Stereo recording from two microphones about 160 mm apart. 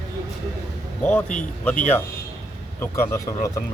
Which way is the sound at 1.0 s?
10° left (ahead or behind).